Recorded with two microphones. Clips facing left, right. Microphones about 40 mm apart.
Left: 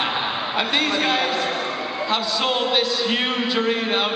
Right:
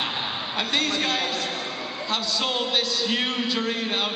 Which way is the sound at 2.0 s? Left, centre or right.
Centre.